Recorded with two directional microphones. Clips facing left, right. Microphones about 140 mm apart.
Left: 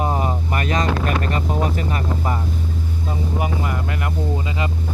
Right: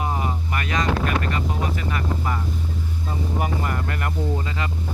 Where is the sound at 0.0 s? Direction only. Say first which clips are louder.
Left 4 dB; 30° left (ahead or behind).